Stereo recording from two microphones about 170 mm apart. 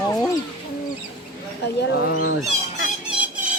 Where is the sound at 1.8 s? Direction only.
80° left.